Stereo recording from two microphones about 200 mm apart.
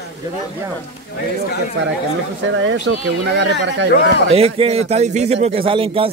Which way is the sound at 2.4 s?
70° right (ahead or behind).